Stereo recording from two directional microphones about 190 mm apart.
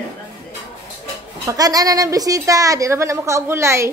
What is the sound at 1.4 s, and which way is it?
A woman's voice, 20° right (ahead or behind).